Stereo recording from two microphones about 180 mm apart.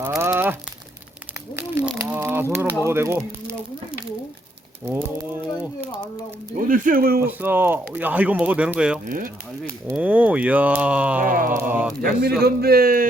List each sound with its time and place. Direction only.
0.2 s crumpling: 10° right (ahead or behind)
1.7 s a sound: 10° right (ahead or behind)
2.8 s speech: 15° right (ahead or behind)
4.9 s speech: 10° right (ahead or behind)
6.6 s speech: 50° right (ahead or behind)
7.2 s speech: 10° right (ahead or behind)
9.0 s speech: 50° right (ahead or behind)
9.9 s speech: 10° right (ahead or behind)
11.2 s speech: 50° right (ahead or behind)
11.5 s speech: 10° right (ahead or behind)
12.4 s speech: 60° right (ahead or behind)